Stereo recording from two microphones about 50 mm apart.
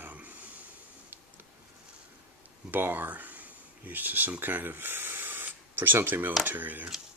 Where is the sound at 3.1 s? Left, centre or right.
Right.